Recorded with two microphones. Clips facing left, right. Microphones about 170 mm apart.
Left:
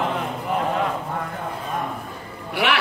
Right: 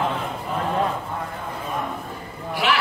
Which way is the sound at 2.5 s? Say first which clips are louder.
Left 1 dB; 65° left (ahead or behind).